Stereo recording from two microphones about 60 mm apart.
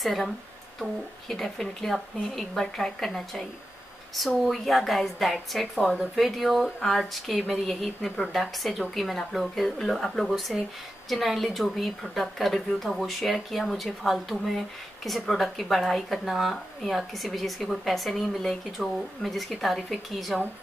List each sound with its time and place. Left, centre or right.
0.0 s speech: centre
1.3 s speech: centre